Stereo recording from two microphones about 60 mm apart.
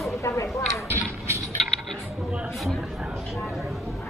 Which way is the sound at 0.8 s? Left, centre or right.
Right.